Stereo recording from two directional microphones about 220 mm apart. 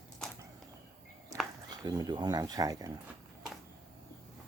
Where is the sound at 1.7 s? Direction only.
15° right (ahead or behind).